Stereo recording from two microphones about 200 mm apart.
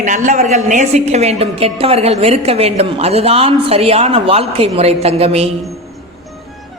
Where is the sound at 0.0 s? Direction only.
40° right (ahead or behind).